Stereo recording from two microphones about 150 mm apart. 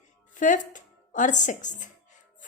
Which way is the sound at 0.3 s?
60° left (ahead or behind).